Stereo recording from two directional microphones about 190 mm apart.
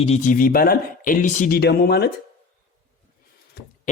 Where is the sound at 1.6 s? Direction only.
60° left (ahead or behind).